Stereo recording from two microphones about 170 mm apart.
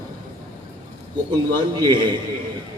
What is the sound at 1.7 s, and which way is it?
Speech, 25° right (ahead or behind).